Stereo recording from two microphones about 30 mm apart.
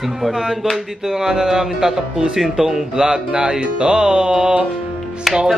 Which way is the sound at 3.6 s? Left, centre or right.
Right.